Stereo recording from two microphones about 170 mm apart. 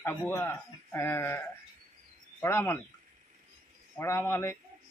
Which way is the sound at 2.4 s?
10° left (ahead or behind).